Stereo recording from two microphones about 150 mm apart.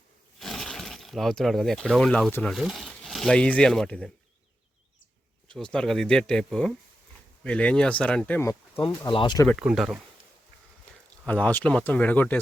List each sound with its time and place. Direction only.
0.3 s speech: centre (ahead or behind)
5.5 s speech: 5° left (ahead or behind)
8.4 s speech: 15° left (ahead or behind)
8.8 s speech: 35° left (ahead or behind)
9.6 s speech: 5° right (ahead or behind)
11.3 s speech: 10° left (ahead or behind)